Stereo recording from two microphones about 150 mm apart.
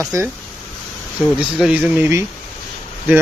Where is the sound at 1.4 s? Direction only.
5° right (ahead or behind).